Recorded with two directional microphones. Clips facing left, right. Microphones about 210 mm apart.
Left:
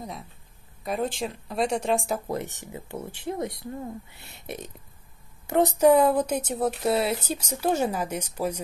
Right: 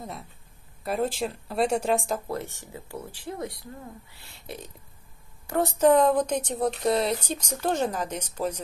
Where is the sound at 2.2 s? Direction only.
20° left (ahead or behind).